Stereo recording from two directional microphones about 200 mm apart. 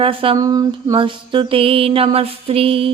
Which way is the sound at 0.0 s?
25° right (ahead or behind).